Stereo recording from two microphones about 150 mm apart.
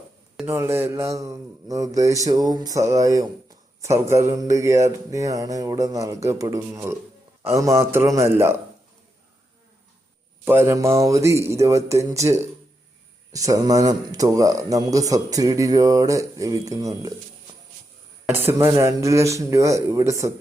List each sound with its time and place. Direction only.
0.4 s a man's voice: 15° right (ahead or behind)
10.4 s speech: 15° right (ahead or behind)
18.3 s speech: 15° right (ahead or behind)